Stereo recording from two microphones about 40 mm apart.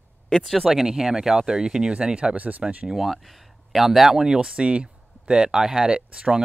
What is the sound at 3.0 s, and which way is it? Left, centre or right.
Speech, centre.